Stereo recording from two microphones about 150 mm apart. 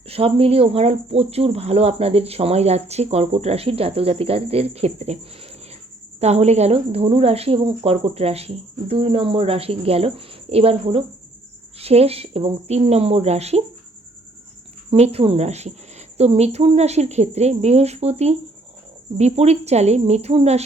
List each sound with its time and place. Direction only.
0.1 s a woman's voice: 40° right (ahead or behind)
14.8 s a woman's voice: 45° right (ahead or behind)